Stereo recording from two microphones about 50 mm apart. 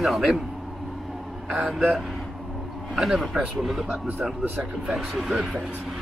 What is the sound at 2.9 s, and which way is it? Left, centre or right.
Speech, centre.